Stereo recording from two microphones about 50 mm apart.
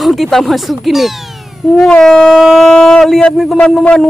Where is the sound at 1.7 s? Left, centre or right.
Centre.